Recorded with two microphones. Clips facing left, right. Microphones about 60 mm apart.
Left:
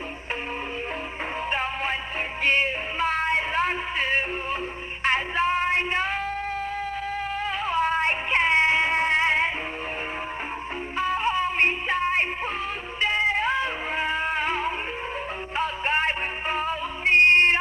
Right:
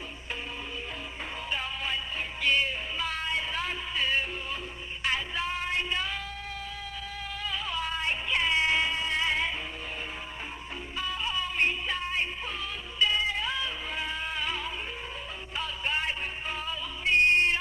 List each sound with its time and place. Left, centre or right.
1.5 s music: left
7.4 s music: left
10.9 s music: left